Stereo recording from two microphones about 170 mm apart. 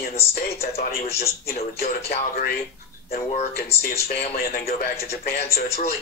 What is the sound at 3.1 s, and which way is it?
Speech, 45° left (ahead or behind).